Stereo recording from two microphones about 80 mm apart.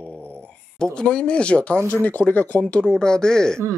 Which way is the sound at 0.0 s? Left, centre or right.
Centre.